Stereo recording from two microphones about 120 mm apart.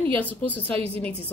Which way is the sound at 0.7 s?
55° right (ahead or behind).